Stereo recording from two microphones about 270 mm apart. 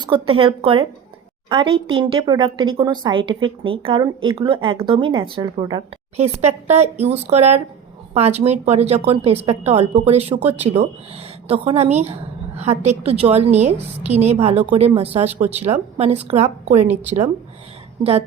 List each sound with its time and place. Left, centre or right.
0.0 s a woman's voice: centre